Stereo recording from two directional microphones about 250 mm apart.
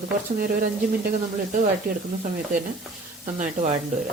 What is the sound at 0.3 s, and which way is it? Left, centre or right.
Speech, right.